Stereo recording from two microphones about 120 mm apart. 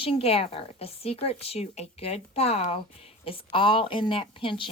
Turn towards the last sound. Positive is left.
turn(degrees=45)  # may be behind; listen again after turning